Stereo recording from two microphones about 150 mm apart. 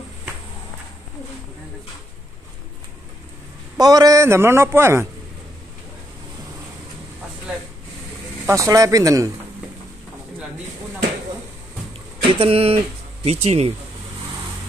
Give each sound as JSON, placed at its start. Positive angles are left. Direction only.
{"t": 3.7, "sound": "a man's voice", "side_deg": -25}
{"t": 8.5, "sound": "speech", "side_deg": -20}
{"t": 12.3, "sound": "speech", "side_deg": -40}